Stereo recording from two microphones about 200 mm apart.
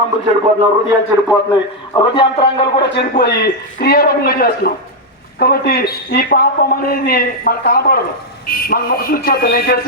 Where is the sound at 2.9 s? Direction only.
55° left (ahead or behind).